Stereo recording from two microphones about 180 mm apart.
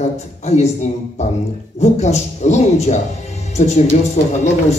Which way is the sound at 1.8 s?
40° left (ahead or behind).